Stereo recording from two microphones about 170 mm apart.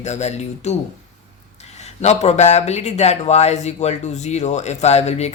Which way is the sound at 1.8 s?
40° left (ahead or behind).